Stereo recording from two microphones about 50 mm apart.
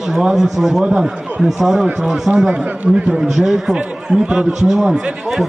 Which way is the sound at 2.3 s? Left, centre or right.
Right.